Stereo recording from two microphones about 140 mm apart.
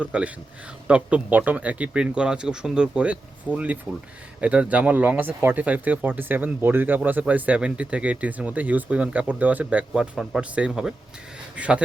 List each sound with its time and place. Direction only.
0.0 s speech: 10° right (ahead or behind)